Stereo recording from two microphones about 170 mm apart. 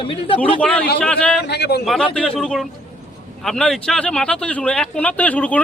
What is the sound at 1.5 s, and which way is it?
Speech, 75° left (ahead or behind).